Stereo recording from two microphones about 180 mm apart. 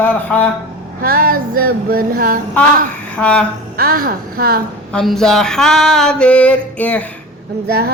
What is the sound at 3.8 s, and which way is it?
Speech, 55° right (ahead or behind).